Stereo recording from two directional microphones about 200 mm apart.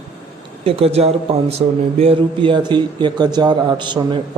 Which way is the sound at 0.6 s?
30° right (ahead or behind).